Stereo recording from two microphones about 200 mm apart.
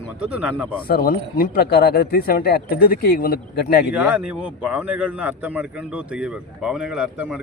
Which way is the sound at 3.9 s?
5° right (ahead or behind).